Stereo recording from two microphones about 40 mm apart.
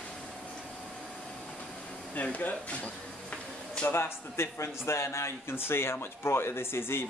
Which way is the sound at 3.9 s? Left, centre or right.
Left.